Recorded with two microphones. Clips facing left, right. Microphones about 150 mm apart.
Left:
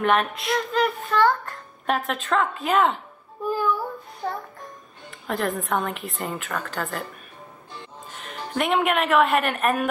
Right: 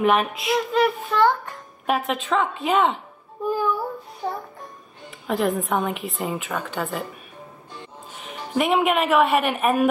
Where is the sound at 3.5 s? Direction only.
5° right (ahead or behind).